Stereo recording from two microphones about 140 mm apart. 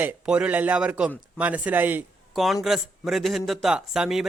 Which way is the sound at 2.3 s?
Centre (ahead or behind).